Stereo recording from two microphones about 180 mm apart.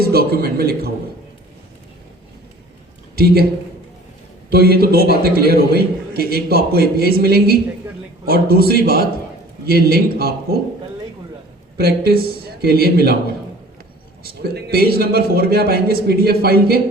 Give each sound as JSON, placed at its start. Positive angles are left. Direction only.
{"t": 0.0, "sound": "a man's voice", "side_deg": -60}
{"t": 4.4, "sound": "a man's voice", "side_deg": -60}
{"t": 11.8, "sound": "a man's voice", "side_deg": -60}
{"t": 14.5, "sound": "a man's voice", "side_deg": -60}